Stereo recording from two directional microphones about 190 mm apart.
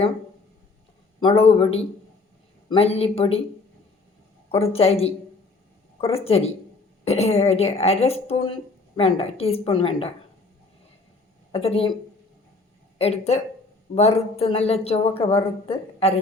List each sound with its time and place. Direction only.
1.2 s a man's voice: 30° left (ahead or behind)
4.5 s a woman's voice: 30° left (ahead or behind)
11.5 s a woman's voice: 30° left (ahead or behind)
13.0 s a woman's voice: 35° left (ahead or behind)